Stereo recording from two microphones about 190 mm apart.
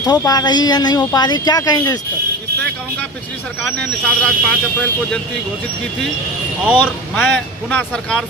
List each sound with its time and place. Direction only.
0.0 s speech: 20° left (ahead or behind)
3.8 s speech: 5° left (ahead or behind)
6.7 s speech: 10° left (ahead or behind)